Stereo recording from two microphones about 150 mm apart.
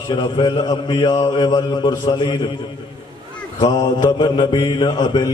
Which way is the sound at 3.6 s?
30° left (ahead or behind).